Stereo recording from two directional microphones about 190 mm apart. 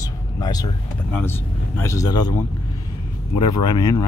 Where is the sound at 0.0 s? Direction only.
20° left (ahead or behind).